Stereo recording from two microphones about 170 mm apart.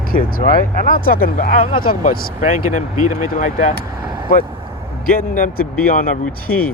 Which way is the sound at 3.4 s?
50° left (ahead or behind).